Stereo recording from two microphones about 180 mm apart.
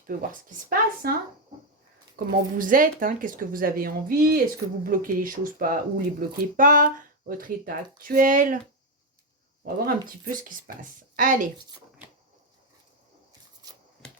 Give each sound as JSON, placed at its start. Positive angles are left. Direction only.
{"t": 0.1, "sound": "speech", "side_deg": -50}
{"t": 2.1, "sound": "speech", "side_deg": -50}
{"t": 9.6, "sound": "speech", "side_deg": -55}